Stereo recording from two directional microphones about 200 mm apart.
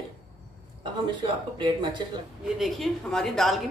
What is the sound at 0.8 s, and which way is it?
Speech, 25° right (ahead or behind).